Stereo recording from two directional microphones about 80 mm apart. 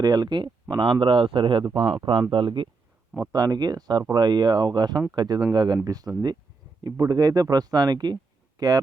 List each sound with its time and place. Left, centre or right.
0.0 s speech: right
3.2 s speech: right